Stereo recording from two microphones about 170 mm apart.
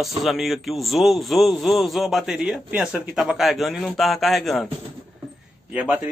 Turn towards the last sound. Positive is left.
turn(degrees=-10)  # may be behind; listen again after turning